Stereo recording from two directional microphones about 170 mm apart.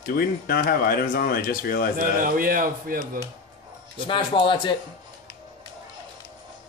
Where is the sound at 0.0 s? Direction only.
60° left (ahead or behind).